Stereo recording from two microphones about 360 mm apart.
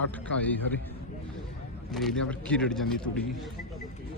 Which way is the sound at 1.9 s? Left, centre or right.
Centre.